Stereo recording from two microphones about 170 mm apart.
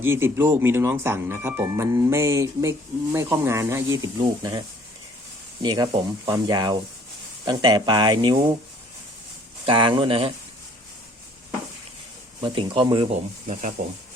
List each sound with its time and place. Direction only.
0.0 s speech: 15° right (ahead or behind)
5.6 s speech: 25° right (ahead or behind)
9.6 s speech: 30° right (ahead or behind)
12.4 s speech: 30° right (ahead or behind)
13.5 s speech: 45° right (ahead or behind)